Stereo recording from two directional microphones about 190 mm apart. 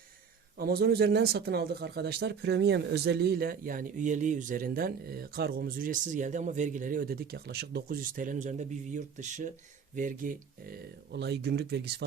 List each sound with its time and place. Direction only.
0.6 s speech: 55° right (ahead or behind)